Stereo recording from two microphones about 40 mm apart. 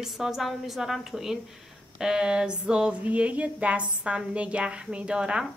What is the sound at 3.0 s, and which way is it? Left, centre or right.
A woman's voice, right.